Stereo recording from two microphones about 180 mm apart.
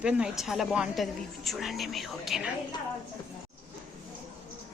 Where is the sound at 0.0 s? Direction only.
5° right (ahead or behind).